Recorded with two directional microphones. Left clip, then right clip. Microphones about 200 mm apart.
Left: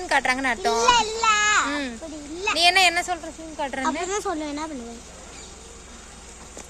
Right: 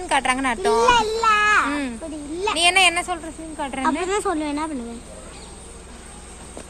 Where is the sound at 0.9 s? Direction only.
15° right (ahead or behind).